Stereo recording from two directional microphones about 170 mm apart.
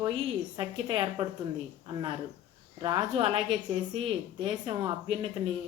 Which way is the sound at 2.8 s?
30° right (ahead or behind).